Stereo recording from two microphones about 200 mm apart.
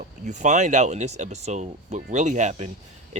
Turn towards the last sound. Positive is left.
turn(degrees=-35)  # may be behind; listen again after turning